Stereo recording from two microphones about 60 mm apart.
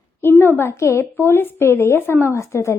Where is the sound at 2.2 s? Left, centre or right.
Left.